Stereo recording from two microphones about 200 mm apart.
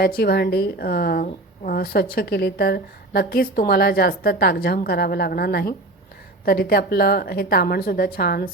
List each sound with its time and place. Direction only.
0.2 s speech: 50° left (ahead or behind)